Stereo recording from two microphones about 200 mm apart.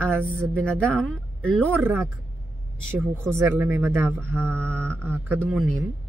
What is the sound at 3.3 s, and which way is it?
Speech, 15° right (ahead or behind).